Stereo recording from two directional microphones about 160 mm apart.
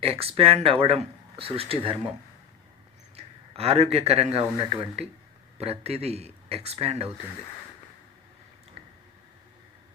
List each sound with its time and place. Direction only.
0.0 s speech: 35° right (ahead or behind)
3.2 s speech: 40° right (ahead or behind)